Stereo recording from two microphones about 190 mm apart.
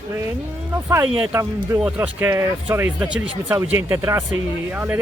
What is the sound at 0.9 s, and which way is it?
Speech, 15° right (ahead or behind).